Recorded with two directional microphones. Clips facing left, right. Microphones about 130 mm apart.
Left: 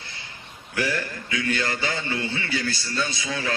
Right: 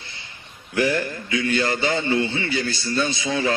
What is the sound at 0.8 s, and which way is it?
A man's voice, 25° right (ahead or behind).